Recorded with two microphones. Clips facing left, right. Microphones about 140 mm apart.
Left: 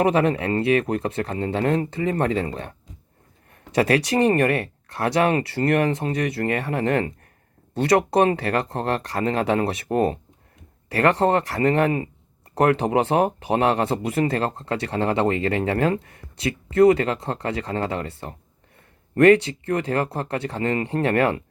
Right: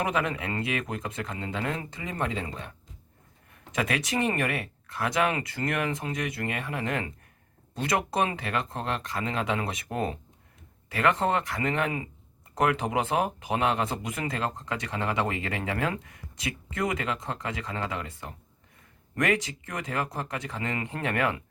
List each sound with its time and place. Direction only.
0.0 s speech: 35° left (ahead or behind)